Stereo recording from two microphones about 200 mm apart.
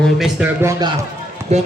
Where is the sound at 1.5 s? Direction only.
35° right (ahead or behind).